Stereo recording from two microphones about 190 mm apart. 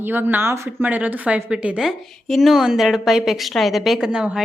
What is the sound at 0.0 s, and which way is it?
A woman's voice, 10° right (ahead or behind).